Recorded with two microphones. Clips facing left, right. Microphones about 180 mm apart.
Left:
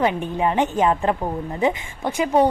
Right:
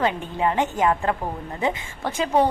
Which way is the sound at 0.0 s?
15° left (ahead or behind).